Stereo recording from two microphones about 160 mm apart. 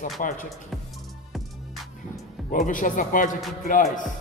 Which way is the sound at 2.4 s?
50° left (ahead or behind).